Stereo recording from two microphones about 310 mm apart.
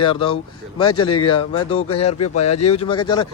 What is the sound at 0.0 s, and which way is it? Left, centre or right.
Speech, centre.